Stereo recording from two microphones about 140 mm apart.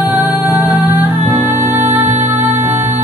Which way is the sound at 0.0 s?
10° right (ahead or behind).